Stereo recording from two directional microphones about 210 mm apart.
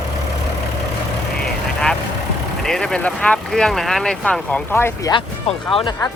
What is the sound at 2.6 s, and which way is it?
Speech, centre (ahead or behind).